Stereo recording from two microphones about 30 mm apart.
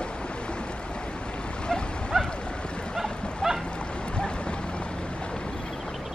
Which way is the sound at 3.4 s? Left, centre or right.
Centre.